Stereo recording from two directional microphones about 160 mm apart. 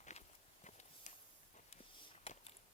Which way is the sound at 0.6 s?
45° left (ahead or behind).